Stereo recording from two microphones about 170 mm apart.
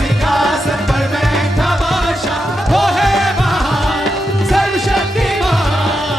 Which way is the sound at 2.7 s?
Centre (ahead or behind).